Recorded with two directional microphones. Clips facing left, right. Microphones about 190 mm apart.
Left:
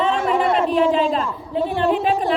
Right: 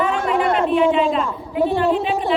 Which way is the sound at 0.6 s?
35° left (ahead or behind).